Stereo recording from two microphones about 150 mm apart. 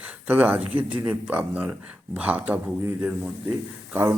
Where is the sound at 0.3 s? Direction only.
10° right (ahead or behind).